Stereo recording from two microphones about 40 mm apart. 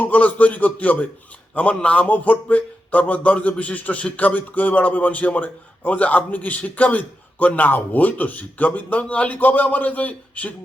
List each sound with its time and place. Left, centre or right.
0.0 s a man's voice: left
2.0 s a man's voice: left